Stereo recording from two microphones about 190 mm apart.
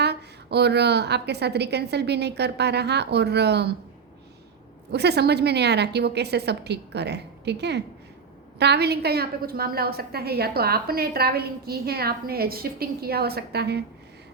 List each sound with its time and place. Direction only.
0.0 s a woman's voice: 60° right (ahead or behind)
4.9 s a woman's voice: 60° right (ahead or behind)